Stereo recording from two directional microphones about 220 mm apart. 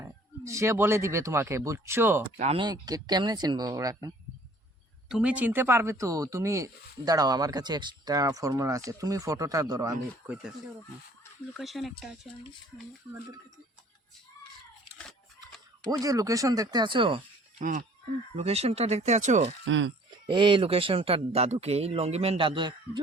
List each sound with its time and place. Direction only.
0.0 s speech: 15° right (ahead or behind)
2.2 s speech: 25° right (ahead or behind)
5.0 s speech: 5° right (ahead or behind)
11.5 s speech: centre (ahead or behind)
15.9 s speech: 15° right (ahead or behind)
17.6 s speech: 35° right (ahead or behind)
19.6 s speech: 55° right (ahead or behind)
20.1 s speech: 20° right (ahead or behind)